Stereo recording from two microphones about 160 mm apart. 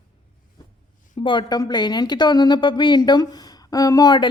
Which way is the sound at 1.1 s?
30° left (ahead or behind).